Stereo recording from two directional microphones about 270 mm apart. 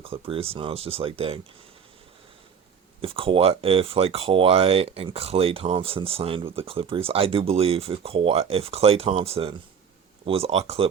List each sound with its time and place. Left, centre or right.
0.0 s speech: right
3.0 s speech: centre